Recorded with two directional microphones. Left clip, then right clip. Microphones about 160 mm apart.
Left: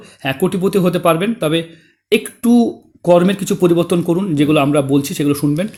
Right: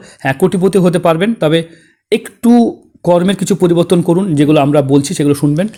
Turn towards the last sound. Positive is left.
turn(degrees=-25)  # may be behind; listen again after turning